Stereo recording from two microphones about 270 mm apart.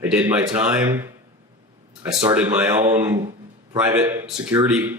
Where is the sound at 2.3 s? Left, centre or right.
Centre.